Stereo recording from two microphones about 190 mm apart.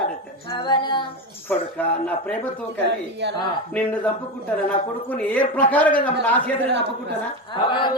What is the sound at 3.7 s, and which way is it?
Speech, 10° left (ahead or behind).